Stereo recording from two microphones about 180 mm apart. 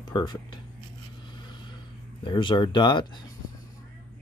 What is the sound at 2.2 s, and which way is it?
Speech, 25° left (ahead or behind).